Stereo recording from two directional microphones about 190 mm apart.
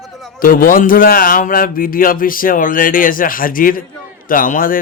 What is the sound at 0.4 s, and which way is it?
Speech, 50° left (ahead or behind).